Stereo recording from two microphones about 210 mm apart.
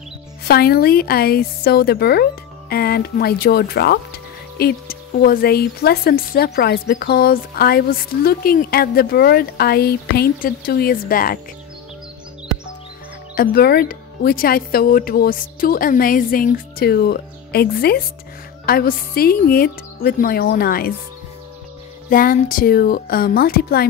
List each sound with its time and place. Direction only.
0.5 s speech: 45° left (ahead or behind)
13.3 s speech: 45° left (ahead or behind)
22.1 s speech: 40° left (ahead or behind)